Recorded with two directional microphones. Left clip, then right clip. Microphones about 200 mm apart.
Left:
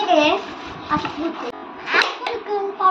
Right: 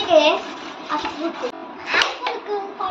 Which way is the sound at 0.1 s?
Centre (ahead or behind).